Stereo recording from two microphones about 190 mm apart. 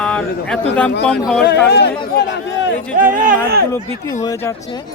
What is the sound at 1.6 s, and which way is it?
Speech, 60° left (ahead or behind).